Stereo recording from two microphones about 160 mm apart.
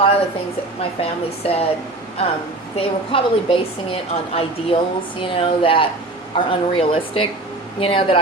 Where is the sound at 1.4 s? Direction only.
35° left (ahead or behind).